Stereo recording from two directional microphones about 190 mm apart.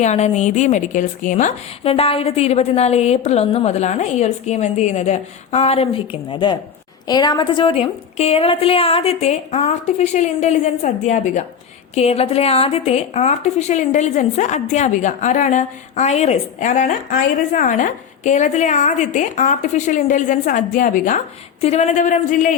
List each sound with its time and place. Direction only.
0.0 s a woman's voice: 35° left (ahead or behind)